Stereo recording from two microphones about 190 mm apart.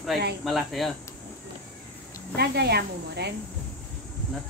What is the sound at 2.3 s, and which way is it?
Speech, 60° right (ahead or behind).